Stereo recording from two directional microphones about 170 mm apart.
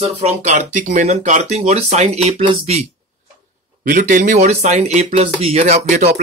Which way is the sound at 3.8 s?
55° right (ahead or behind).